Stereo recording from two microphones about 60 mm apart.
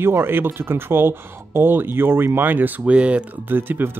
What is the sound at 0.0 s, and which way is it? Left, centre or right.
Speech, right.